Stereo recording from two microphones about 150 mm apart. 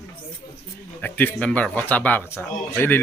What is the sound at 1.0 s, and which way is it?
Speech, 10° left (ahead or behind).